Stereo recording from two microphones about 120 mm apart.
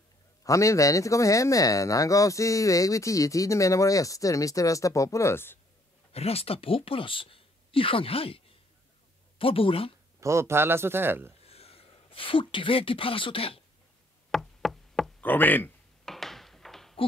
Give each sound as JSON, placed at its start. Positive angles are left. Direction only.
{"t": 0.4, "sound": "speech", "side_deg": 25}
{"t": 6.1, "sound": "speech", "side_deg": 55}
{"t": 9.4, "sound": "speech", "side_deg": 50}
{"t": 10.2, "sound": "a man's voice", "side_deg": -25}
{"t": 11.4, "sound": "speech", "side_deg": 60}
{"t": 14.3, "sound": "knock", "side_deg": 0}
{"t": 15.2, "sound": "speech", "side_deg": 15}
{"t": 16.1, "sound": "a sound", "side_deg": 0}